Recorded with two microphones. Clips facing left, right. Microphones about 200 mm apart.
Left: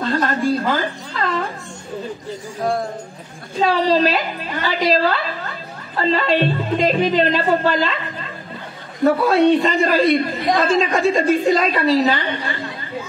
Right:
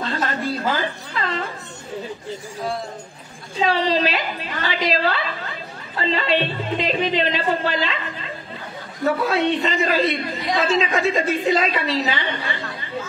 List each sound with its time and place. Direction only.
0.0 s a woman's voice: 45° left (ahead or behind)
3.6 s a man's voice: 40° left (ahead or behind)